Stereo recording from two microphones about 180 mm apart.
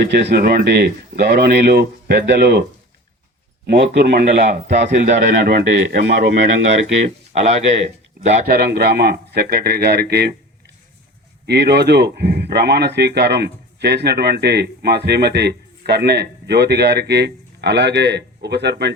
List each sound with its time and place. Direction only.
0.1 s speech: 70° right (ahead or behind)
3.7 s speech: 65° right (ahead or behind)
4.4 s a man's voice: 40° right (ahead or behind); by 6.3 s 65° right (ahead or behind)
6.3 s a man's voice: 40° right (ahead or behind)
8.4 s speech: 60° right (ahead or behind)
11.4 s speech: 65° right (ahead or behind)